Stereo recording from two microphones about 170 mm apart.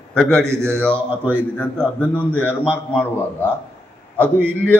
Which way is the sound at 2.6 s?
5° right (ahead or behind).